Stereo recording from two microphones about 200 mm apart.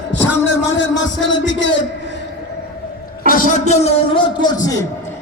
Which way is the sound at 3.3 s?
40° left (ahead or behind).